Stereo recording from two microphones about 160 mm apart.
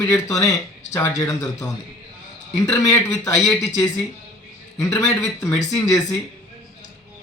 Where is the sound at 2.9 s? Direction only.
20° left (ahead or behind).